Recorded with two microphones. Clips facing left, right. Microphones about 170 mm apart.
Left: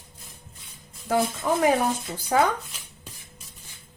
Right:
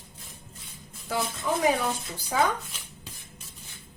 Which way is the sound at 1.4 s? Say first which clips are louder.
Left 1 dB; 55° left (ahead or behind).